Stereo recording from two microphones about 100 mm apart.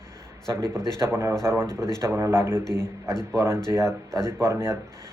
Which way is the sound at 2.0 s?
25° right (ahead or behind).